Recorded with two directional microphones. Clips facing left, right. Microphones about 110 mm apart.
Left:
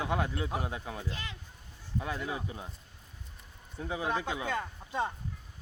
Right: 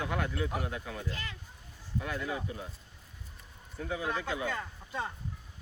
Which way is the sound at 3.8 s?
25° left (ahead or behind).